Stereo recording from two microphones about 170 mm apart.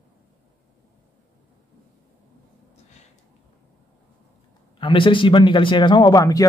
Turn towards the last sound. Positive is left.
turn(degrees=20)  # may be behind; listen again after turning